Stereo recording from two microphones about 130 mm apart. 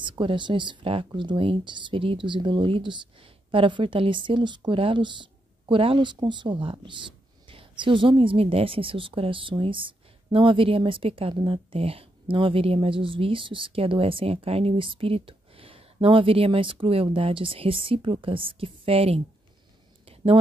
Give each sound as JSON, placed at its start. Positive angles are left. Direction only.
{"t": 0.0, "sound": "speech", "side_deg": -40}